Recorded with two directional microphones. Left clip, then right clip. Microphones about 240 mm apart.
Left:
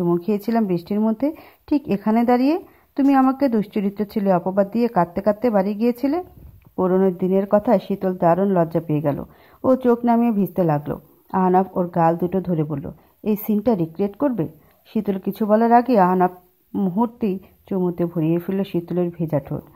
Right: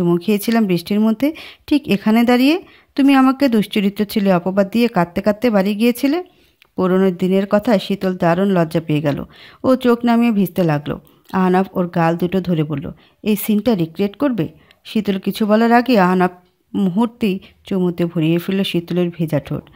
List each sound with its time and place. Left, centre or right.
0.0 s speech: right